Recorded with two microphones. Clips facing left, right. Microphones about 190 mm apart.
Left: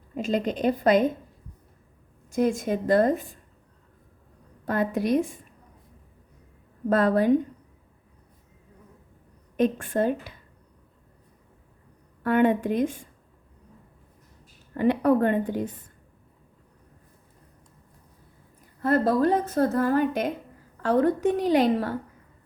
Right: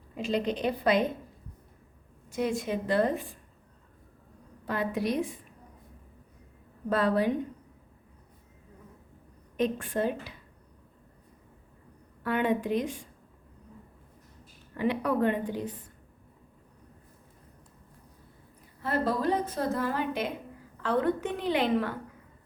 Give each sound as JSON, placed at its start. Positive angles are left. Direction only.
{"t": 0.2, "sound": "a woman's voice", "side_deg": 45}
{"t": 2.3, "sound": "a woman's voice", "side_deg": 45}
{"t": 4.6, "sound": "a woman's voice", "side_deg": 45}
{"t": 6.9, "sound": "a woman's voice", "side_deg": 45}
{"t": 9.6, "sound": "a woman's voice", "side_deg": 50}
{"t": 12.2, "sound": "a woman's voice", "side_deg": 50}
{"t": 14.8, "sound": "a woman's voice", "side_deg": 50}
{"t": 18.8, "sound": "a woman's voice", "side_deg": 45}